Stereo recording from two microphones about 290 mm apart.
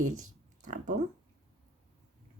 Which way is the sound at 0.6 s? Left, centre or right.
Right.